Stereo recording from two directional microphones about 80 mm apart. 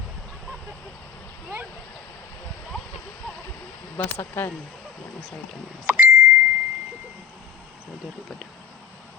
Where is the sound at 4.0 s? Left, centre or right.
Left.